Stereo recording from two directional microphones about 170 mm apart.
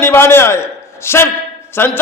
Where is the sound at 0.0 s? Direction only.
15° left (ahead or behind).